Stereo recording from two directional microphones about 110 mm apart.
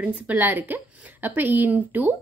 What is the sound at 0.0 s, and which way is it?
A woman's voice, 15° right (ahead or behind).